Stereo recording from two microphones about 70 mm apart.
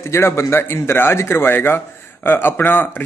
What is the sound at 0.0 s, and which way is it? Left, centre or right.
Speech, left.